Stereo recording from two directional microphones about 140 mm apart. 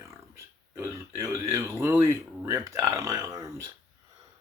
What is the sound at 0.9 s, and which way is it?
Speech, 20° right (ahead or behind).